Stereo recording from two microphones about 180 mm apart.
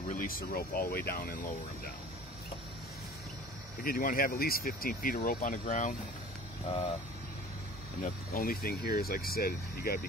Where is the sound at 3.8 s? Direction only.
55° left (ahead or behind).